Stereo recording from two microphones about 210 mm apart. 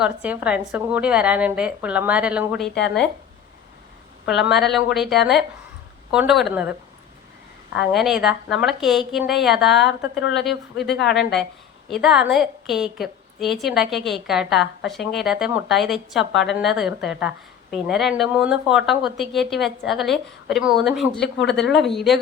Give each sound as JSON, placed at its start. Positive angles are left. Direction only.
{"t": 0.0, "sound": "a woman's voice", "side_deg": -5}
{"t": 4.4, "sound": "a woman's voice", "side_deg": 0}
{"t": 7.9, "sound": "a woman's voice", "side_deg": 0}
{"t": 21.2, "sound": "speech", "side_deg": 55}
{"t": 21.5, "sound": "a woman's voice", "side_deg": 0}